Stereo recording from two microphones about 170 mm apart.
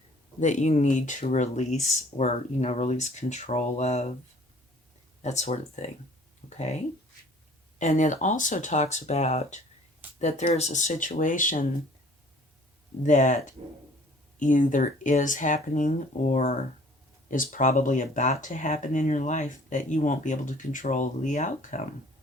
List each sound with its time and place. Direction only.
0.3 s speech: 45° left (ahead or behind)
5.2 s speech: 40° left (ahead or behind)
13.0 s speech: 45° left (ahead or behind)